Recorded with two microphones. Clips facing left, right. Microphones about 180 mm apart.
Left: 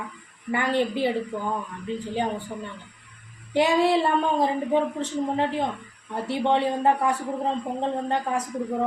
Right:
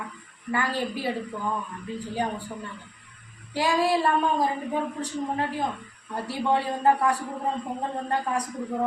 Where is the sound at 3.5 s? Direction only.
20° left (ahead or behind).